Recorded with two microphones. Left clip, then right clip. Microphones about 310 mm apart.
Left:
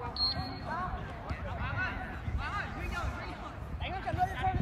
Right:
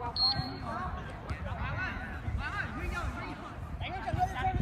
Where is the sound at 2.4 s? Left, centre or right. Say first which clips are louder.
Right 1 dB; left.